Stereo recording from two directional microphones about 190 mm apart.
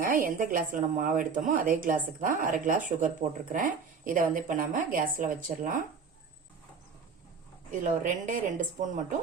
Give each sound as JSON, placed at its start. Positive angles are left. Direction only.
{"t": 0.0, "sound": "speech", "side_deg": -45}
{"t": 7.7, "sound": "speech", "side_deg": -45}